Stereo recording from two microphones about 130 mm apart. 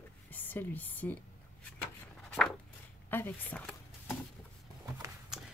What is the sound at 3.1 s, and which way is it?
Speech, 15° left (ahead or behind).